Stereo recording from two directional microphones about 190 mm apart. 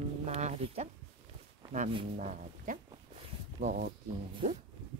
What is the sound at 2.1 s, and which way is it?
Speech, 40° right (ahead or behind).